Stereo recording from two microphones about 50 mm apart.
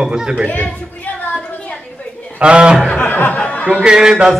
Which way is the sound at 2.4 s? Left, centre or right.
Centre.